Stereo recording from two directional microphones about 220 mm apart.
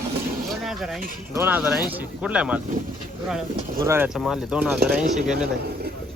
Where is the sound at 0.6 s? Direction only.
Centre (ahead or behind).